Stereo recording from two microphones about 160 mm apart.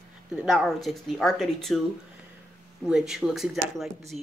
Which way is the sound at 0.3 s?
5° right (ahead or behind).